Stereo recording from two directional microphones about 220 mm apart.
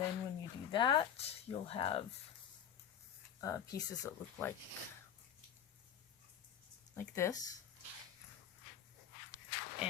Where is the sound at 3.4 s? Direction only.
15° left (ahead or behind).